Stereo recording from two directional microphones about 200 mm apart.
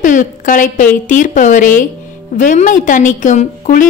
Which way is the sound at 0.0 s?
40° left (ahead or behind).